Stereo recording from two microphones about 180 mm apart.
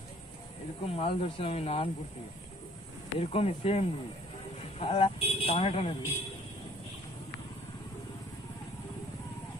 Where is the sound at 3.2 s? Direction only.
35° left (ahead or behind).